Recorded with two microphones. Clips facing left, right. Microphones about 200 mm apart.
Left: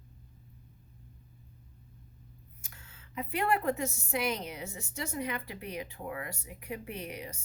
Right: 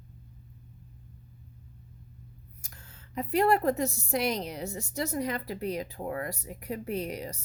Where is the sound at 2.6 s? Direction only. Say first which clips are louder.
Right 2 dB; 40° right (ahead or behind).